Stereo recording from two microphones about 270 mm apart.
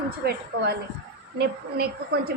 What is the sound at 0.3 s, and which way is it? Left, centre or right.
A woman's voice, right.